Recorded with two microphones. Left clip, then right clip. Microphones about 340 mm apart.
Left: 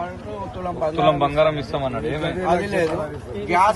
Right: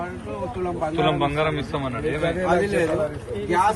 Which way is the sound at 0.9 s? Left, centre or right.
Left.